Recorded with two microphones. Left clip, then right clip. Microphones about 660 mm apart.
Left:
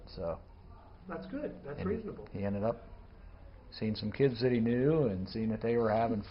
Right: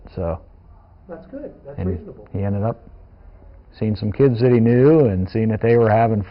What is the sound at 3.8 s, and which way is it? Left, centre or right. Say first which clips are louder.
Speech: right 13 dB; right.